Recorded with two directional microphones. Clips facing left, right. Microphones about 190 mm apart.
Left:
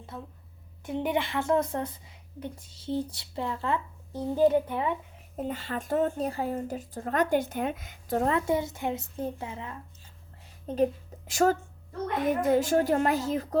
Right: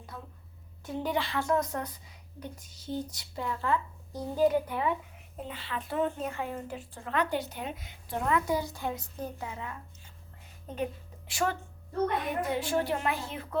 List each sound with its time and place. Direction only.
0.1 s speech: 25° left (ahead or behind)
5.4 s speech: 45° left (ahead or behind); by 9.7 s 25° left (ahead or behind)
11.3 s a woman's voice: 45° left (ahead or behind)